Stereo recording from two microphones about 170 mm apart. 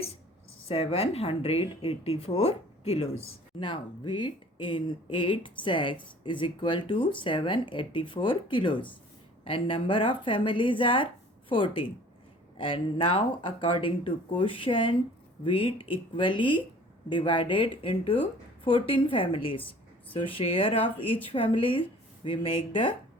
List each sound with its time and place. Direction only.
0.7 s a woman's voice: 35° left (ahead or behind)